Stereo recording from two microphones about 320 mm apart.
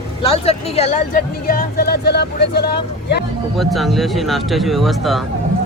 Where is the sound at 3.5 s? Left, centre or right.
Centre.